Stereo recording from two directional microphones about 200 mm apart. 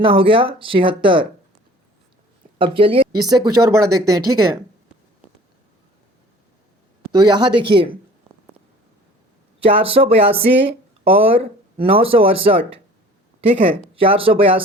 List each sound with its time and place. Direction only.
0.0 s speech: 25° right (ahead or behind)
2.6 s speech: 25° right (ahead or behind)
7.1 s speech: 20° right (ahead or behind)
9.6 s speech: 30° right (ahead or behind)
14.0 s speech: 25° right (ahead or behind)